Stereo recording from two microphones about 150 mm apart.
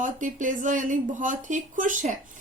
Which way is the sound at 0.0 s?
60° right (ahead or behind).